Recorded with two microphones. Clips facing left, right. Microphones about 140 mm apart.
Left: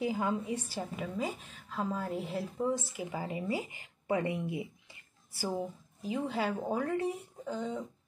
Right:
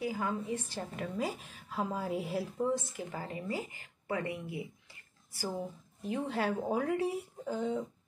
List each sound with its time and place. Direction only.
0.0 s a woman's voice: 20° left (ahead or behind)
0.7 s a woman's voice: 5° left (ahead or behind)
2.6 s speech: 10° left (ahead or behind)
6.0 s a woman's voice: centre (ahead or behind)